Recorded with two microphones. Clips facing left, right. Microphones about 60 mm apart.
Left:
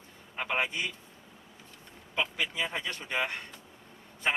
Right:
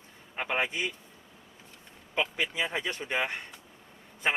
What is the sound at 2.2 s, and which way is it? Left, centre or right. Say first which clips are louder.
A man's voice: right 2 dB; centre.